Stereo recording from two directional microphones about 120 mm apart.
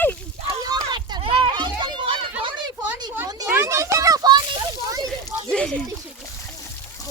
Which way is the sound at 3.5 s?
25° right (ahead or behind).